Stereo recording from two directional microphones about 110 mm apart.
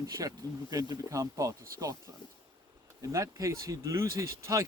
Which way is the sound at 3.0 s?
30° right (ahead or behind).